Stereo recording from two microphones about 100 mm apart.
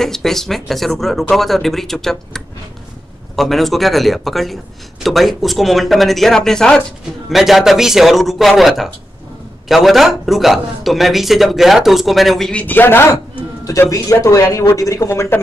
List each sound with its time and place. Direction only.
0.0 s a man's voice: 5° left (ahead or behind)
12.6 s a man's voice: 20° left (ahead or behind)
13.7 s speech: 35° left (ahead or behind)